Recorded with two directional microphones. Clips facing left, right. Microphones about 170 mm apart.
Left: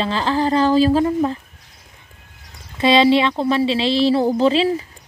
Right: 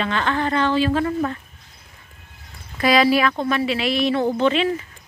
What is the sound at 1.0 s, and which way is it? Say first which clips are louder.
Speech: left 4 dB; 25° left (ahead or behind).